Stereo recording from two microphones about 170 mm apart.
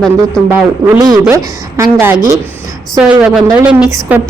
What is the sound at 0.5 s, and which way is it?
A woman's voice, 15° right (ahead or behind).